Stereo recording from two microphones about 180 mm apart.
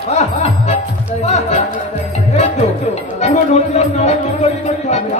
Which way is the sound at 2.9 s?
40° left (ahead or behind).